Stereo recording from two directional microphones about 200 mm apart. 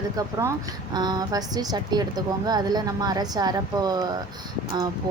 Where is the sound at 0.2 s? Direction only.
15° right (ahead or behind).